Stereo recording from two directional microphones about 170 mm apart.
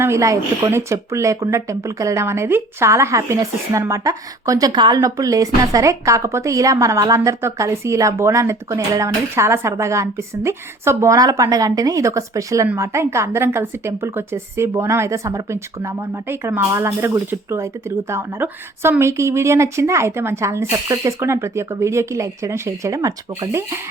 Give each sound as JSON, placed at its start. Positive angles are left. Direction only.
{"t": 0.0, "sound": "a woman's voice", "side_deg": -15}